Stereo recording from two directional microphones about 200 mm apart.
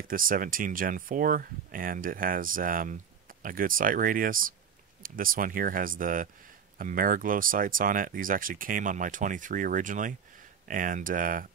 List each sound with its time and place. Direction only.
0.1 s speech: 45° right (ahead or behind)